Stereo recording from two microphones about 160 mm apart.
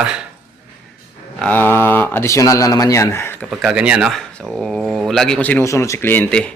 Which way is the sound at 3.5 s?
5° right (ahead or behind).